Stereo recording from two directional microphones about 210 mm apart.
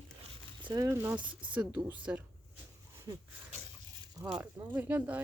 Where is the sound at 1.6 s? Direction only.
5° right (ahead or behind).